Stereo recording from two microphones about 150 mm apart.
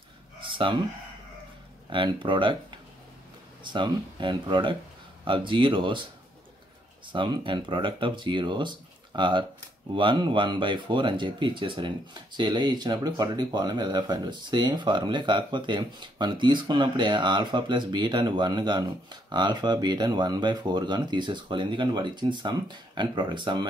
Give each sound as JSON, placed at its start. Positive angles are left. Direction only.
{"t": 0.4, "sound": "a sound", "side_deg": -35}
{"t": 1.9, "sound": "speech", "side_deg": -35}
{"t": 3.6, "sound": "speech", "side_deg": -30}
{"t": 7.1, "sound": "speech", "side_deg": -35}